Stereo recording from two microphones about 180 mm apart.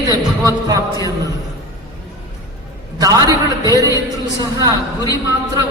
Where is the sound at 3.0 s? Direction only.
20° right (ahead or behind).